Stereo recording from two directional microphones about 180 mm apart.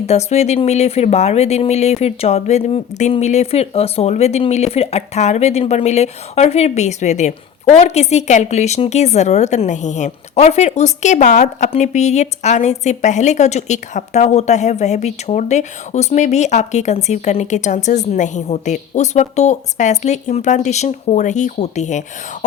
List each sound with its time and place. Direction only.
0.1 s speech: 35° left (ahead or behind)